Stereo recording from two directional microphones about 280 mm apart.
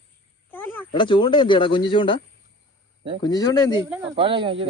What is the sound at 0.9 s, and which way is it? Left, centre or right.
Speech, centre.